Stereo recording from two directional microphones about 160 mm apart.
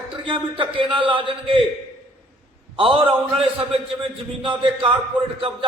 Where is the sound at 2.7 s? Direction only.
35° right (ahead or behind).